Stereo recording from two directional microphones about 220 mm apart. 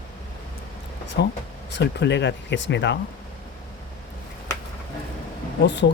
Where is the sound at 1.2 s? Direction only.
50° left (ahead or behind).